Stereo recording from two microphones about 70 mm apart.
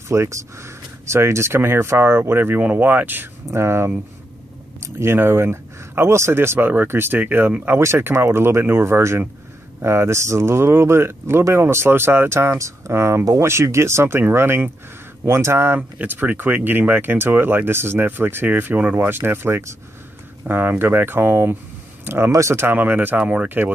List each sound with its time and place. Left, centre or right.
0.1 s speech: right
3.4 s speech: right
22.7 s speech: right